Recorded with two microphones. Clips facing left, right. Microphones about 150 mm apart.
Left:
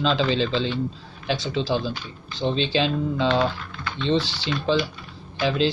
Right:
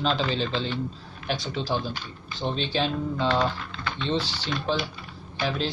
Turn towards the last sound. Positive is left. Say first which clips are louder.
# left 6 dB
turn(degrees=90)